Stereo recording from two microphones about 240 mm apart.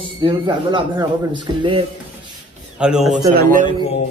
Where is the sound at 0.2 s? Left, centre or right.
Centre.